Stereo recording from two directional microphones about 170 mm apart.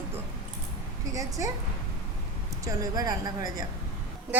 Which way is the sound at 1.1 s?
20° right (ahead or behind).